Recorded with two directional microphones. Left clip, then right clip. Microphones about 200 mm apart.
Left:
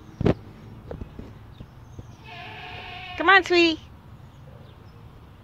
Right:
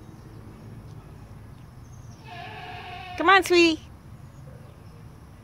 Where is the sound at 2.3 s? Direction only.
40° right (ahead or behind).